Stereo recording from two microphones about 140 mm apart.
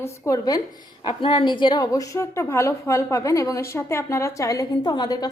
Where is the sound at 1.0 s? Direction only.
35° left (ahead or behind).